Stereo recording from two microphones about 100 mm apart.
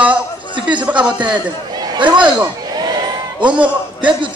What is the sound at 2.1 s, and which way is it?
A man's voice, 45° right (ahead or behind).